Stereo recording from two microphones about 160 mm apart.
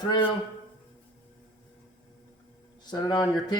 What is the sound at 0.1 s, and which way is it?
Speech, 35° left (ahead or behind).